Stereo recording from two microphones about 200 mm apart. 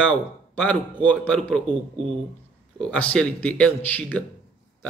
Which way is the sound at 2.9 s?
5° left (ahead or behind).